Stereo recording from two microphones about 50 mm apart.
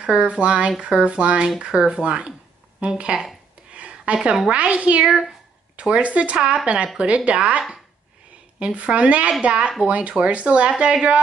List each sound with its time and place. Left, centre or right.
0.0 s speech: right
3.7 s a sound: right
4.5 s speech: right